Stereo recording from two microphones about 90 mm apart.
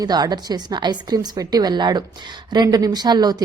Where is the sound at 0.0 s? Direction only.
50° right (ahead or behind).